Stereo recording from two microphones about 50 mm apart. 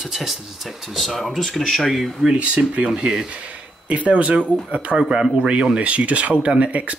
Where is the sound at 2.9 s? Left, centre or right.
Centre.